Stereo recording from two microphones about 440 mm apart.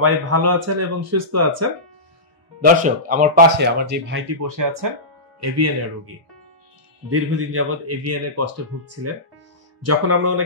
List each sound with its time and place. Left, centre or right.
0.0 s speech: right
2.6 s speech: centre
4.4 s speech: right
7.1 s speech: right